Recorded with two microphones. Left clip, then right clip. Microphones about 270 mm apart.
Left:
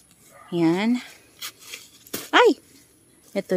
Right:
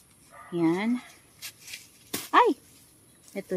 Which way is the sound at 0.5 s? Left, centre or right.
Left.